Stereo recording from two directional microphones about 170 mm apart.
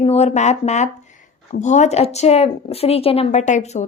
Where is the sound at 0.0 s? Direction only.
40° left (ahead or behind).